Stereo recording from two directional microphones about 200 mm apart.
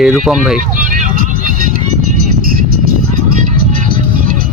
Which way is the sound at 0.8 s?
40° right (ahead or behind).